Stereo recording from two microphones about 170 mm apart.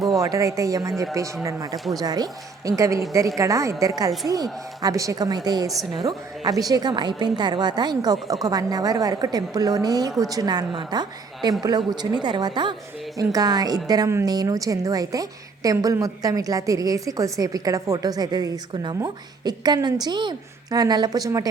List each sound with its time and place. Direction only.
0.1 s a woman's voice: 20° right (ahead or behind)